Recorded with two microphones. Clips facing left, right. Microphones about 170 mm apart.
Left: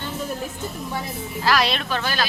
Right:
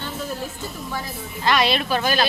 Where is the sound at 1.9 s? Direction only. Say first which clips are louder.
Right 4 dB; 15° right (ahead or behind).